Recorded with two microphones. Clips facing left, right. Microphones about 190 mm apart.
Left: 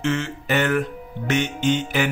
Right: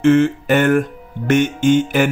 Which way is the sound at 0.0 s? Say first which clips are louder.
Right 12 dB; 55° right (ahead or behind).